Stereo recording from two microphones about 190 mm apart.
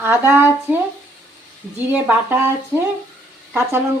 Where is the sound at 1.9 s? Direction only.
10° right (ahead or behind).